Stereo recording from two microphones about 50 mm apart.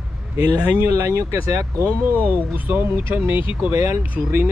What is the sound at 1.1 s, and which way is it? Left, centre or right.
Speech, right.